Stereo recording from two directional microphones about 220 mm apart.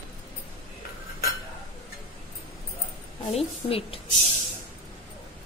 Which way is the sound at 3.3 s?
25° left (ahead or behind).